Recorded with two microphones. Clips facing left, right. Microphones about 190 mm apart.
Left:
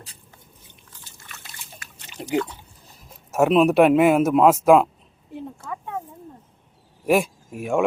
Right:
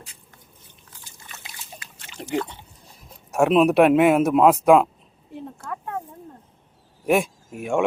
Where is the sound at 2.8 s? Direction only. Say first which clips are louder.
Right 1 dB; centre (ahead or behind).